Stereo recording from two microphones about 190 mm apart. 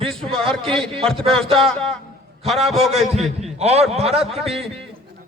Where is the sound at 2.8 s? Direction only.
35° right (ahead or behind).